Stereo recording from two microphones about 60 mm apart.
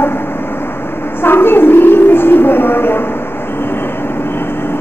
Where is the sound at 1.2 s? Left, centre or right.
Left.